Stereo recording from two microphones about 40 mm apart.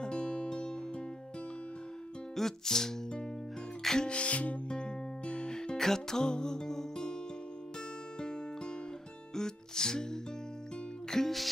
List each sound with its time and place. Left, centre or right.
0.0 s music: left
2.3 s music: centre
4.1 s music: left; by 7.2 s centre
8.2 s music: left